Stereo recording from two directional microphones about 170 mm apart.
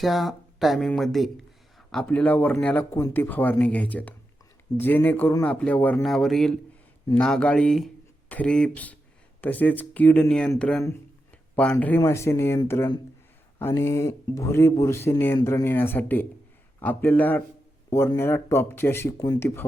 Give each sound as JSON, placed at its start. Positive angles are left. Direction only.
{"t": 0.0, "sound": "speech", "side_deg": 0}